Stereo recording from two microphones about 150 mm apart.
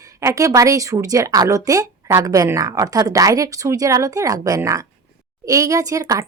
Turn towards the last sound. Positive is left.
turn(degrees=-20)  # may be behind; listen again after turning